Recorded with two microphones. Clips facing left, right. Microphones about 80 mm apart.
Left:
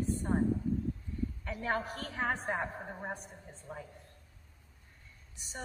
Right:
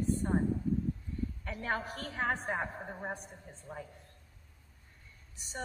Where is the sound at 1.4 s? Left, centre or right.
Centre.